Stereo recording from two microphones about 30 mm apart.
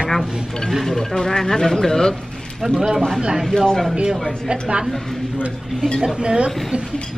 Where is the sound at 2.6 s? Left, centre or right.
Centre.